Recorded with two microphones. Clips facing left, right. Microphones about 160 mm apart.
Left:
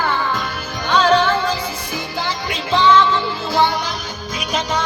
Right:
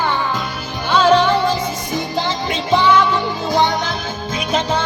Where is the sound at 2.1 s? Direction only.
25° right (ahead or behind).